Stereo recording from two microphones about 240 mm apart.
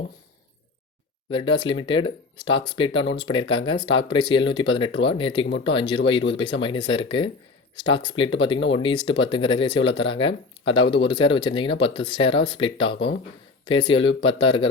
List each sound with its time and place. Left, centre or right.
1.3 s speech: left